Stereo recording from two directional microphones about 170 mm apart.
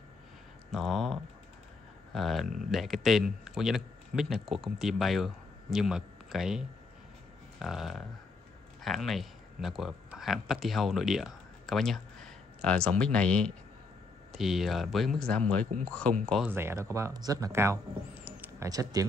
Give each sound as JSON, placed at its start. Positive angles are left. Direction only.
{"t": 0.7, "sound": "speech", "side_deg": 0}
{"t": 2.4, "sound": "speech", "side_deg": -50}
{"t": 2.7, "sound": "speech", "side_deg": 0}
{"t": 16.4, "sound": "speech", "side_deg": -15}
{"t": 18.7, "sound": "speech", "side_deg": -20}